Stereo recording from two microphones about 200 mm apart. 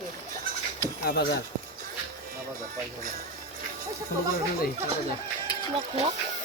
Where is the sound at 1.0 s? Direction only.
50° left (ahead or behind).